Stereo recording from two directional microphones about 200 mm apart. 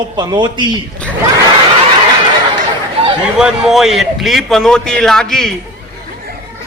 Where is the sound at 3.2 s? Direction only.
5° right (ahead or behind).